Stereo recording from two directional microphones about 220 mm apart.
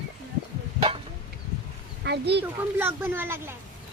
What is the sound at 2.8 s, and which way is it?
Speech, 10° right (ahead or behind).